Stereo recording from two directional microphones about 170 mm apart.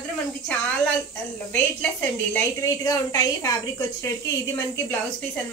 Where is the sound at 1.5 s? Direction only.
10° left (ahead or behind).